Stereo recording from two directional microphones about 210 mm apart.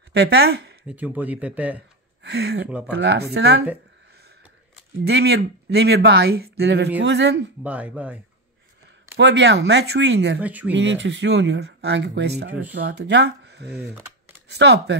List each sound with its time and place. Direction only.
0.1 s speech: 55° right (ahead or behind)
0.8 s speech: 5° right (ahead or behind)
2.2 s speech: 50° right (ahead or behind)
5.0 s speech: 50° right (ahead or behind)
7.6 s speech: 5° right (ahead or behind)
9.1 s speech: 55° right (ahead or behind)
10.4 s speech: 5° right (ahead or behind)
10.7 s speech: 60° right (ahead or behind)